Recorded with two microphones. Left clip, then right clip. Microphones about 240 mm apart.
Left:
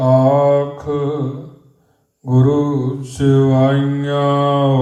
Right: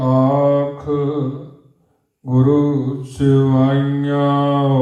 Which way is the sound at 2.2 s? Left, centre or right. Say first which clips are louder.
Even; left.